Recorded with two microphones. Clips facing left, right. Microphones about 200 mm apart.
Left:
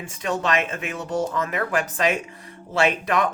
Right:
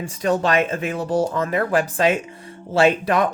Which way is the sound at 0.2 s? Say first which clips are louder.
Right 5 dB; 35° right (ahead or behind).